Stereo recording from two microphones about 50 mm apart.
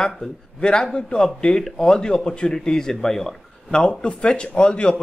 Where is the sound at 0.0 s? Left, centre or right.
Centre.